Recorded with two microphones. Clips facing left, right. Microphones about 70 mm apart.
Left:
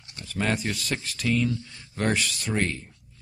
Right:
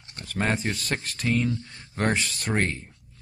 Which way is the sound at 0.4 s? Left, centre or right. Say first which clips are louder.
Right 1 dB; right.